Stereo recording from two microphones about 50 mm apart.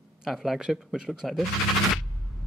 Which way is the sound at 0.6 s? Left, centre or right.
Centre.